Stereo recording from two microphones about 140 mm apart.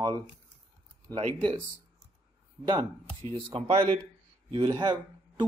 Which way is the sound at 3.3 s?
40° right (ahead or behind).